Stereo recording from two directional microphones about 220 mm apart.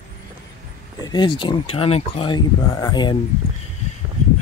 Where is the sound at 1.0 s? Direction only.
20° left (ahead or behind).